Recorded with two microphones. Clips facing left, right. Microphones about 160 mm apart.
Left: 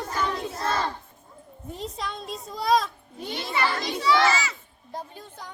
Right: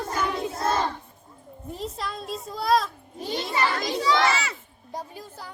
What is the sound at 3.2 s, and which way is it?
Speech, 35° right (ahead or behind).